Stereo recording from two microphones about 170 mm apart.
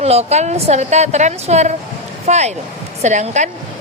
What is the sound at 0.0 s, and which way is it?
A woman's voice, 40° right (ahead or behind).